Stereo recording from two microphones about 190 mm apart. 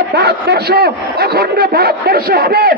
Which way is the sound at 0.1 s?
60° right (ahead or behind).